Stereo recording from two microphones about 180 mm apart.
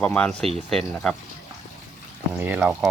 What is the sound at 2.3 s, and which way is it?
Speech, 10° right (ahead or behind).